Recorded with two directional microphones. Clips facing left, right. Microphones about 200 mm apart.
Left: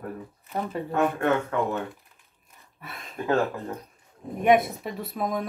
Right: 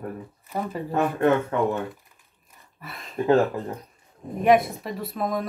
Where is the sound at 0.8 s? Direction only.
25° right (ahead or behind).